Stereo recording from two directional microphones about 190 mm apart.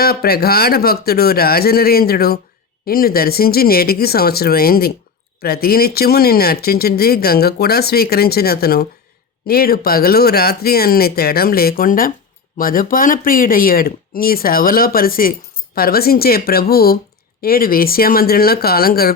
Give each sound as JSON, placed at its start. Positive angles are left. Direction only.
{"t": 0.0, "sound": "speech", "side_deg": 55}